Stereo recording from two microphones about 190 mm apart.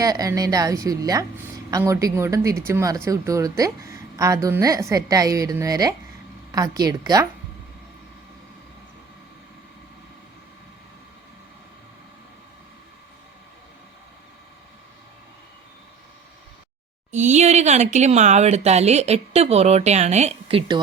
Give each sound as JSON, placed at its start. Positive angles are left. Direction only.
{"t": 0.0, "sound": "a woman's voice", "side_deg": -20}
{"t": 17.1, "sound": "speech", "side_deg": -40}